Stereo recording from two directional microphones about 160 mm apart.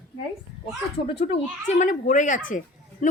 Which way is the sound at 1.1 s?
40° left (ahead or behind).